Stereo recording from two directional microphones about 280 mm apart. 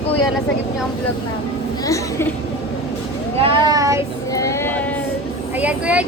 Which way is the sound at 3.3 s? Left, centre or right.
Centre.